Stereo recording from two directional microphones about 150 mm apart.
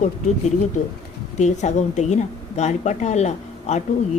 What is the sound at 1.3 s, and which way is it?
A woman's voice, 50° left (ahead or behind).